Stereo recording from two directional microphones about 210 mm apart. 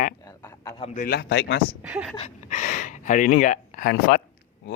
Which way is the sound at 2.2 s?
35° left (ahead or behind).